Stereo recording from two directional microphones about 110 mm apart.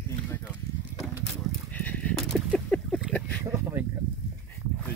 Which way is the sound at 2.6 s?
Centre (ahead or behind).